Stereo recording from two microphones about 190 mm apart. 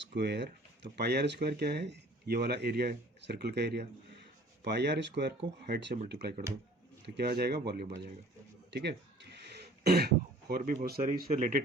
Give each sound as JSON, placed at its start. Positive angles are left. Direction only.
{"t": 0.1, "sound": "speech", "side_deg": -65}
{"t": 8.7, "sound": "throat clearing", "side_deg": -65}
{"t": 11.3, "sound": "speech", "side_deg": -45}